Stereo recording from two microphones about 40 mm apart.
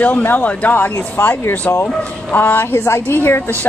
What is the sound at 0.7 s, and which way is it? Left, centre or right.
Speech, left.